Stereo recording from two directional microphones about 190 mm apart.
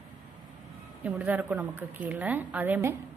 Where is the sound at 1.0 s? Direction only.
10° right (ahead or behind).